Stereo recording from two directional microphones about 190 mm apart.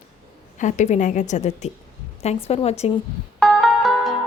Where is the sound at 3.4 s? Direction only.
Centre (ahead or behind).